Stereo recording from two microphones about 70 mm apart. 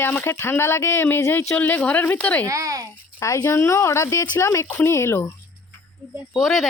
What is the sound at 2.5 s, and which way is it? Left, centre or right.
Speech, right.